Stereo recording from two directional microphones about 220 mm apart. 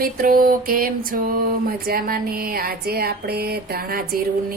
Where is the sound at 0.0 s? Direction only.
40° right (ahead or behind).